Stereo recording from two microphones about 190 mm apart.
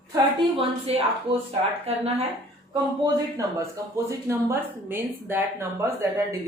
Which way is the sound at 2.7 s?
20° right (ahead or behind).